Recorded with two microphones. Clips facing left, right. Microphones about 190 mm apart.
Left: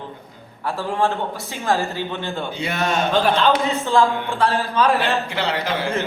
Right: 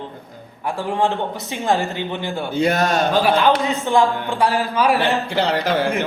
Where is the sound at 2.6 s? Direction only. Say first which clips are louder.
Right 4 dB; 35° right (ahead or behind).